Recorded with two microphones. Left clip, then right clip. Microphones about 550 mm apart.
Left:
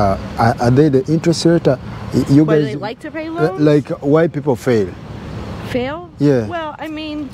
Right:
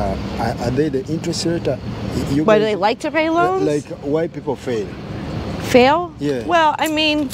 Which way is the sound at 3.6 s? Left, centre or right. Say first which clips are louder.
Left 6 dB; left.